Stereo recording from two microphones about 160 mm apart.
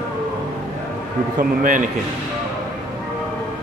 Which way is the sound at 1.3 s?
55° right (ahead or behind).